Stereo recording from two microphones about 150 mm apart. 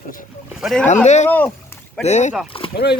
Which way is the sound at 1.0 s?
50° left (ahead or behind).